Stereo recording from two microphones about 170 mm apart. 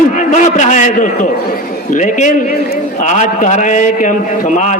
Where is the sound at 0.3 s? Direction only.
45° left (ahead or behind).